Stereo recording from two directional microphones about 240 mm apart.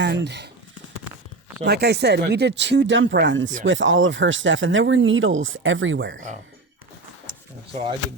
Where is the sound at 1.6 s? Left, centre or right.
Right.